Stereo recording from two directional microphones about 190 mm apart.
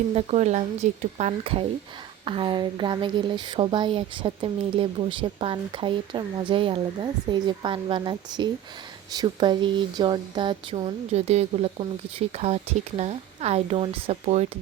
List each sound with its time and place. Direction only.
0.1 s speech: 35° right (ahead or behind)